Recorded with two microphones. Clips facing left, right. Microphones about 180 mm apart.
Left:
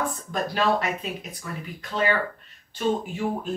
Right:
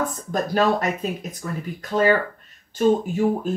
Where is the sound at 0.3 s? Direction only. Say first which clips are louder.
Right 4 dB; 45° right (ahead or behind).